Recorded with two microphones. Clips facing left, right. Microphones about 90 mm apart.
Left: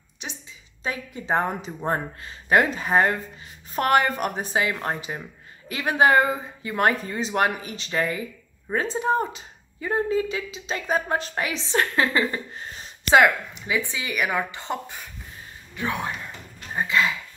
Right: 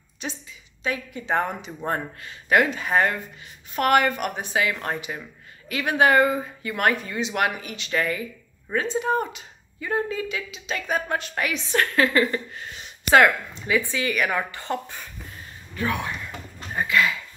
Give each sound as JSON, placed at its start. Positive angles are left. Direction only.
{"t": 0.2, "sound": "speech", "side_deg": 15}
{"t": 0.8, "sound": "speech", "side_deg": 30}
{"t": 7.9, "sound": "speech", "side_deg": 25}
{"t": 12.5, "sound": "a sound", "side_deg": 35}
{"t": 13.1, "sound": "speech", "side_deg": 15}